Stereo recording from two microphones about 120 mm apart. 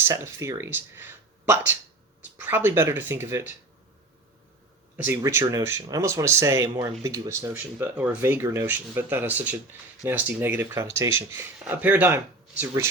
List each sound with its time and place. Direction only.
0.1 s speech: 25° right (ahead or behind)
5.2 s speech: 25° right (ahead or behind)